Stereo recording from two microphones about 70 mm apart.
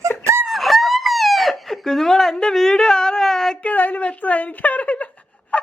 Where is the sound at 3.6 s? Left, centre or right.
Left.